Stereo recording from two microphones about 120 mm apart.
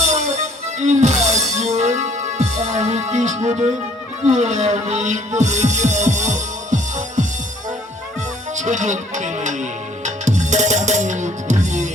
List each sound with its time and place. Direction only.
0.0 s music: 70° right (ahead or behind); by 7.3 s 90° right
8.5 s music: 90° right